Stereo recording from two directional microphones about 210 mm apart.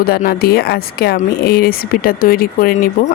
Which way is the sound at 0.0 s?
45° left (ahead or behind).